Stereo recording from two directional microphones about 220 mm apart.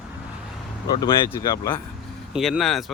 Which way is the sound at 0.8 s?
20° left (ahead or behind).